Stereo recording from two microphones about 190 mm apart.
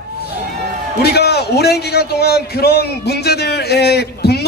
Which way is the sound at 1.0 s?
60° left (ahead or behind).